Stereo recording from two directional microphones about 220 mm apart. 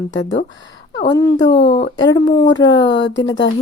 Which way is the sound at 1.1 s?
15° left (ahead or behind).